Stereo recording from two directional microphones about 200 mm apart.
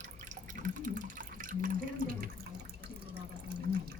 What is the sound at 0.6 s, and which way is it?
Water, 40° right (ahead or behind).